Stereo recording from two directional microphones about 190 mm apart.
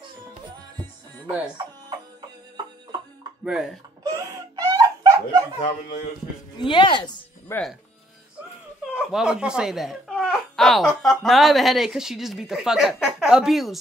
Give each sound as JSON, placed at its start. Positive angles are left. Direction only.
{"t": 3.4, "sound": "speech", "side_deg": 0}
{"t": 4.0, "sound": "wail", "side_deg": -20}
{"t": 6.6, "sound": "a woman's voice", "side_deg": 25}
{"t": 7.5, "sound": "speech", "side_deg": 10}
{"t": 8.9, "sound": "speech", "side_deg": -5}